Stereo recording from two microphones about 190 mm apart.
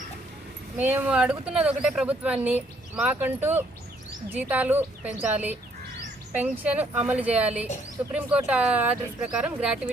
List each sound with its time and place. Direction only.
0.8 s speech: 10° right (ahead or behind)